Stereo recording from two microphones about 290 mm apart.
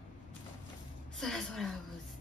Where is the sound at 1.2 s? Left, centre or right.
Centre.